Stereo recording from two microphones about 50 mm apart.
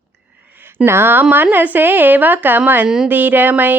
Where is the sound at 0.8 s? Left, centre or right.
Right.